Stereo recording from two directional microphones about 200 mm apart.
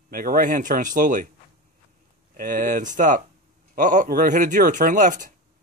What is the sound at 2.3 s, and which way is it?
Speech, 45° right (ahead or behind).